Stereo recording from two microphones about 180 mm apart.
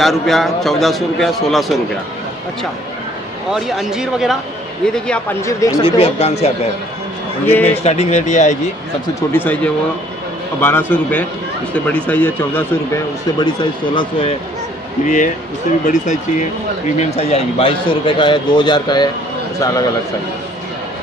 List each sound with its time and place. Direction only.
0.0 s speech: centre (ahead or behind)
3.5 s speech: centre (ahead or behind)
5.4 s a man's voice: 15° left (ahead or behind)
5.9 s speech: 30° left (ahead or behind)
7.6 s speech: 40° left (ahead or behind)
9.3 s a man's voice: 10° left (ahead or behind)
13.4 s speech: 25° left (ahead or behind)
15.0 s speech: 45° left (ahead or behind); by 19.9 s 20° left (ahead or behind)